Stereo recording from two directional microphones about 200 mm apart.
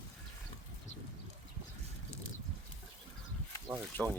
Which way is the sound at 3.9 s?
10° left (ahead or behind).